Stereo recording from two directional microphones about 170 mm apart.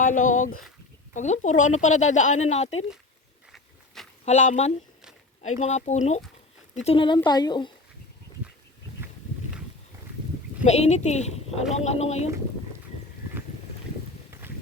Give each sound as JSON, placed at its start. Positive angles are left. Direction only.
{"t": 0.0, "sound": "a woman's voice", "side_deg": 50}
{"t": 3.5, "sound": "a sound", "side_deg": 0}
{"t": 4.3, "sound": "a woman's voice", "side_deg": 45}
{"t": 10.6, "sound": "a woman's voice", "side_deg": 40}